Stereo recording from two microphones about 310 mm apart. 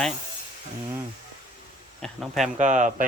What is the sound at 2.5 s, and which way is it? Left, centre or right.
Speech, right.